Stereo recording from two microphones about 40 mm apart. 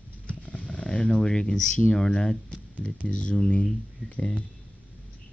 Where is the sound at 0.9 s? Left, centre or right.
Centre.